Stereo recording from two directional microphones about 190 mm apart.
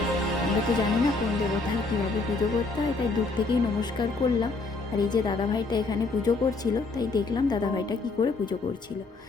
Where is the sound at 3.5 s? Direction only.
25° left (ahead or behind).